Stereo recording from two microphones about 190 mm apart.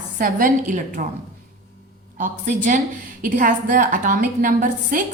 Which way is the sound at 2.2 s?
40° right (ahead or behind).